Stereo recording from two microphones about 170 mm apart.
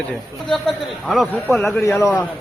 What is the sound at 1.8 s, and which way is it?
Speech, 15° left (ahead or behind).